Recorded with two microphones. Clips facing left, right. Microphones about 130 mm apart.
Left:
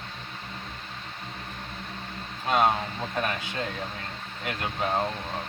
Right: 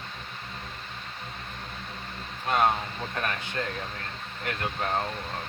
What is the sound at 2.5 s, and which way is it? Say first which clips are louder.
Speech: left 1 dB; 15° left (ahead or behind).